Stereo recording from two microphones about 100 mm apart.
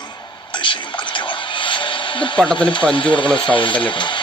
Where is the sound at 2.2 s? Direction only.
5° left (ahead or behind).